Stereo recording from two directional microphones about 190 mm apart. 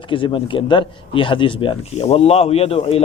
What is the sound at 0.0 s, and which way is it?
Speech, 25° left (ahead or behind).